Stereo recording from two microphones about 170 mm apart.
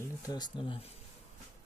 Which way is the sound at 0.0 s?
25° left (ahead or behind).